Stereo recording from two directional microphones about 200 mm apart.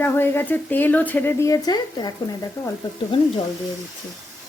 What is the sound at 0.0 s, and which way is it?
Speech, 10° left (ahead or behind).